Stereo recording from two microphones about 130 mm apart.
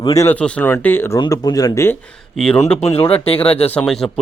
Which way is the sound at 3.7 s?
5° left (ahead or behind).